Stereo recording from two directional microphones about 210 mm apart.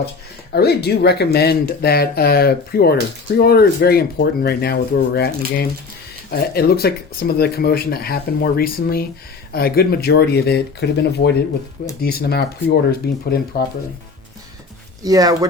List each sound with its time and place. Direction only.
0.5 s speech: 50° left (ahead or behind)
6.3 s speech: 50° left (ahead or behind)
15.0 s speech: 15° right (ahead or behind)